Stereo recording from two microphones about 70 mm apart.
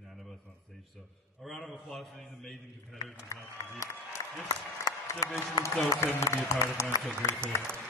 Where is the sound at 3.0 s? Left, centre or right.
Left.